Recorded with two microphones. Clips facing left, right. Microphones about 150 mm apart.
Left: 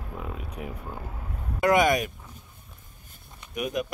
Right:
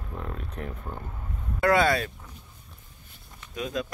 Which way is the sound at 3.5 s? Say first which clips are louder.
Left 2 dB; 20° left (ahead or behind).